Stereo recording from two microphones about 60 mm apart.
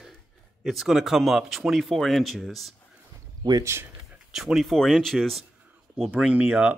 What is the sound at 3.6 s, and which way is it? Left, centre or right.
Speech, right.